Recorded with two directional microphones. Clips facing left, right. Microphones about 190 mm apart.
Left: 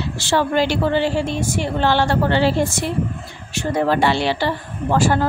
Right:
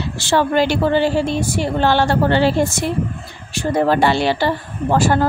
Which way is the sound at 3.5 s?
35° right (ahead or behind).